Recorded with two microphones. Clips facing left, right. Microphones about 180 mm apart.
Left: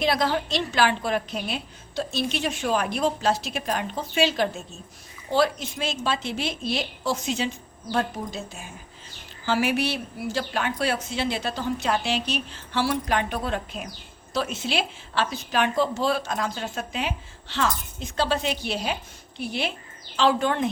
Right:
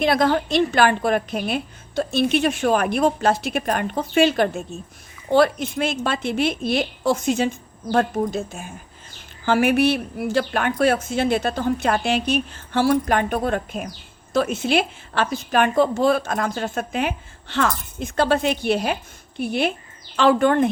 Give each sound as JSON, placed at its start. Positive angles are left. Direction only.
{"t": 0.0, "sound": "a woman's voice", "side_deg": -55}